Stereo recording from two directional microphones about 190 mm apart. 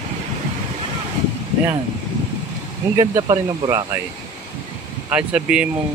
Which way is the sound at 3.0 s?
20° right (ahead or behind).